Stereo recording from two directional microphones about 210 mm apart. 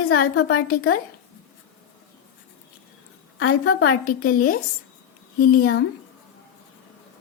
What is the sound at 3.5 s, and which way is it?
Speech, 90° left.